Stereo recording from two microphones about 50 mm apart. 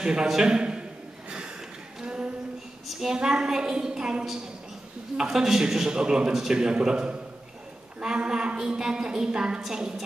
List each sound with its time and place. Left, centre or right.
0.0 s a man's voice: centre
2.0 s a sound: centre
3.2 s a man's voice: centre